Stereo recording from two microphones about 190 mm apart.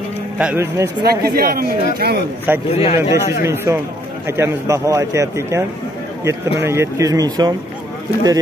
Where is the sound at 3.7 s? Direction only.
15° right (ahead or behind).